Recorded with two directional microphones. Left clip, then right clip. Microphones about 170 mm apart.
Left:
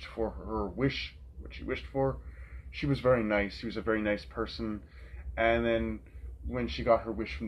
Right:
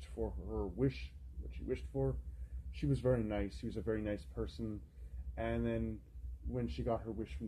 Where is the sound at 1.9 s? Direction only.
20° right (ahead or behind).